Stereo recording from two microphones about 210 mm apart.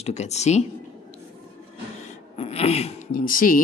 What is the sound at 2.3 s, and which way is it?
Speech, 30° left (ahead or behind).